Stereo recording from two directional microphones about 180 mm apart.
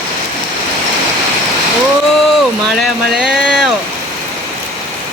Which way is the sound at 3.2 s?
5° right (ahead or behind).